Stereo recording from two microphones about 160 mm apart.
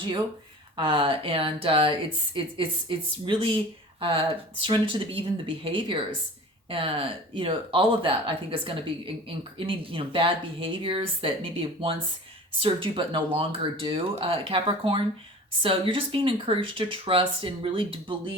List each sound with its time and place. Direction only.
0.8 s a woman's voice: 35° right (ahead or behind)